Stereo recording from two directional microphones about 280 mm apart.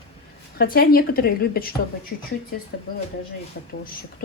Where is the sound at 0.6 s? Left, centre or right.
Left.